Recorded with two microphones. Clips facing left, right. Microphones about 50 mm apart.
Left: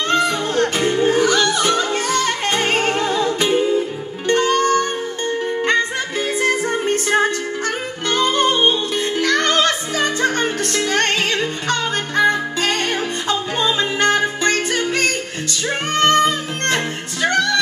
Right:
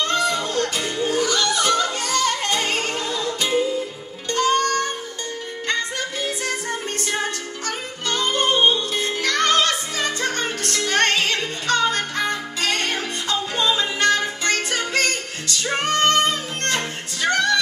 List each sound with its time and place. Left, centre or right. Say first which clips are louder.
0.1 s music: left 4 dB; left